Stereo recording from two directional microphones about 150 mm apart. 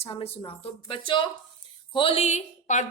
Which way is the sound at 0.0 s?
40° left (ahead or behind).